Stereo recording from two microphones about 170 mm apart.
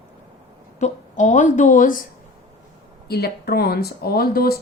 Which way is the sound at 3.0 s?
70° left (ahead or behind).